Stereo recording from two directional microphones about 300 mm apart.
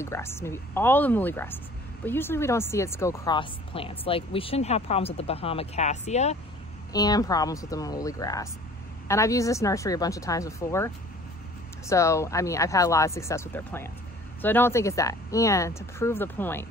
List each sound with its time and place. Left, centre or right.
0.0 s speech: centre
11.9 s speech: centre